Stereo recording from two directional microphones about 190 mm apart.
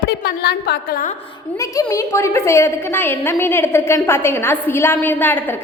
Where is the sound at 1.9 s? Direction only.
15° left (ahead or behind).